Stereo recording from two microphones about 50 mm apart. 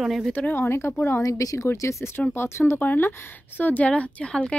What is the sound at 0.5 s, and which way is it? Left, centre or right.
Speech, left.